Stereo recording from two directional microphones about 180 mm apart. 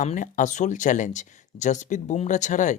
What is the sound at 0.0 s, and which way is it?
Speech, 45° left (ahead or behind).